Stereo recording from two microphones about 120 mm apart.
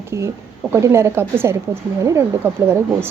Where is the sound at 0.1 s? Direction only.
25° right (ahead or behind).